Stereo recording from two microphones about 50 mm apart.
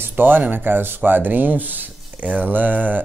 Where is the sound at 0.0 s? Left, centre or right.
Right.